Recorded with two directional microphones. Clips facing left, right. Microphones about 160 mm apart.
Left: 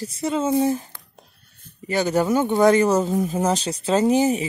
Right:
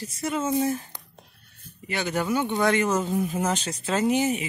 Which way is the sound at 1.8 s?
40° left (ahead or behind).